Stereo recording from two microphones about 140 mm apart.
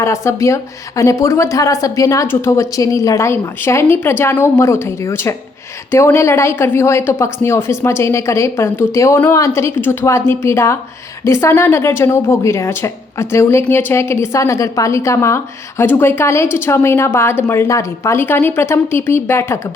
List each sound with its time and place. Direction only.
0.0 s a woman's voice: 20° left (ahead or behind)